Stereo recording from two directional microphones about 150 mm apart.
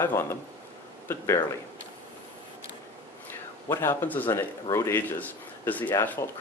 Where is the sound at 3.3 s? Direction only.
15° left (ahead or behind).